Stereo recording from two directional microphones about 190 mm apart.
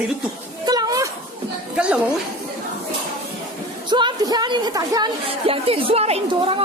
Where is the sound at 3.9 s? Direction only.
25° right (ahead or behind).